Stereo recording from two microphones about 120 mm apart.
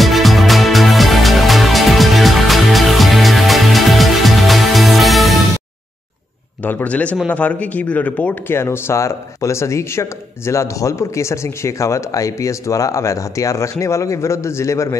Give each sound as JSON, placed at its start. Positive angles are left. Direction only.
{"t": 0.0, "sound": "music", "side_deg": 0}
{"t": 6.6, "sound": "a man's voice", "side_deg": 15}